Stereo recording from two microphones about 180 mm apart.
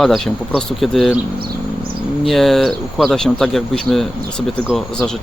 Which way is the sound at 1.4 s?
60° right (ahead or behind).